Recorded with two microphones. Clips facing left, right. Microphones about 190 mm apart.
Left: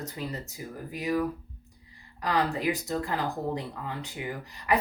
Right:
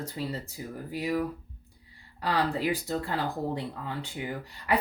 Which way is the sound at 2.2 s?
35° right (ahead or behind).